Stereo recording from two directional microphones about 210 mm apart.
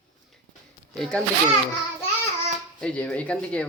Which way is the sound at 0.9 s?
5° left (ahead or behind).